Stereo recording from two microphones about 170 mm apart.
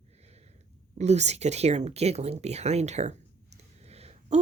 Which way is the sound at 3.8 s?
40° right (ahead or behind).